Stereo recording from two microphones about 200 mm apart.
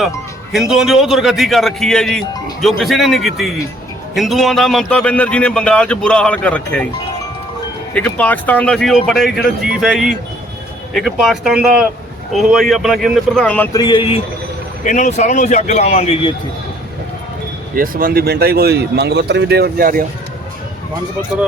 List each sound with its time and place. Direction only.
0.5 s a man's voice: centre (ahead or behind)
7.9 s a man's voice: 5° left (ahead or behind)
13.7 s speech: 25° left (ahead or behind)
14.8 s a man's voice: 35° left (ahead or behind)
17.7 s speech: 45° right (ahead or behind)